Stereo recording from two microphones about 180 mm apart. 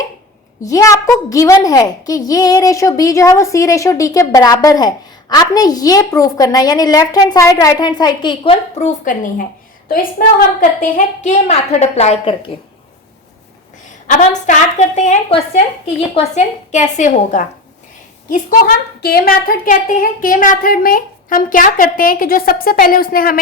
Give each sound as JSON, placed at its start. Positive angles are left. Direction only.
{"t": 0.6, "sound": "a woman's voice", "side_deg": 20}
{"t": 8.8, "sound": "a woman's voice", "side_deg": 40}
{"t": 9.9, "sound": "a woman's voice", "side_deg": 50}
{"t": 14.1, "sound": "a woman's voice", "side_deg": 40}